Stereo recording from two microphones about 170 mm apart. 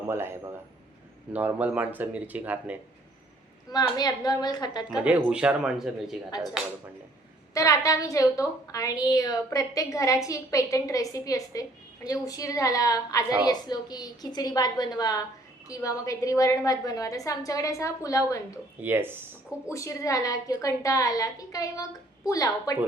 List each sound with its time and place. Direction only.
0.1 s speech: 15° right (ahead or behind)
3.7 s a woman's voice: 25° left (ahead or behind)
4.9 s speech: 10° right (ahead or behind)
7.5 s a woman's voice: 20° left (ahead or behind)
18.8 s speech: 10° right (ahead or behind)
19.6 s a woman's voice: 20° left (ahead or behind)